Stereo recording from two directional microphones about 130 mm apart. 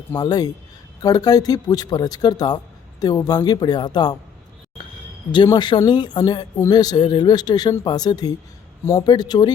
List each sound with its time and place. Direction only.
0.2 s speech: 30° left (ahead or behind)
5.5 s speech: 35° left (ahead or behind)
8.8 s speech: 20° left (ahead or behind)
9.0 s speech: 30° left (ahead or behind)